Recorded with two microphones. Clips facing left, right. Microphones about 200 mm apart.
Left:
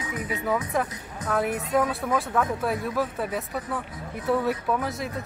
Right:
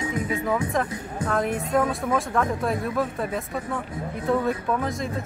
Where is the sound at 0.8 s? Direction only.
5° left (ahead or behind).